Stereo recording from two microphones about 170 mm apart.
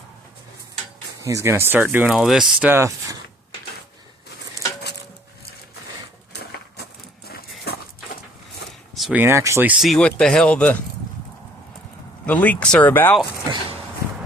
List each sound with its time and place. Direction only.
1.2 s speech: 15° right (ahead or behind)
7.6 s dog: 70° left (ahead or behind)
9.0 s speech: 5° right (ahead or behind)
12.2 s speech: 10° left (ahead or behind)